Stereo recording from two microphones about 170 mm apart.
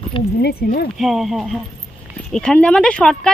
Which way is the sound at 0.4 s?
65° left (ahead or behind).